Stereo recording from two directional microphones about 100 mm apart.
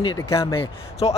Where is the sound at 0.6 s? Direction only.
90° left.